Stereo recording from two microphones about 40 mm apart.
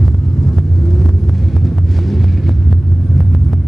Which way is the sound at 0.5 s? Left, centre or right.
Centre.